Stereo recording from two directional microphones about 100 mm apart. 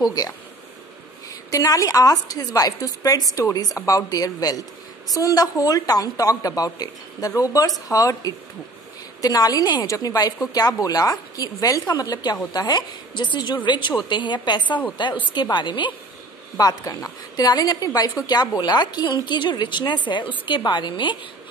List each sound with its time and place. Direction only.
0.0 s a woman's voice: 40° left (ahead or behind)
1.5 s a woman's voice: 35° left (ahead or behind); by 15.9 s 50° left (ahead or behind)
16.5 s a woman's voice: 35° left (ahead or behind); by 21.2 s 55° left (ahead or behind)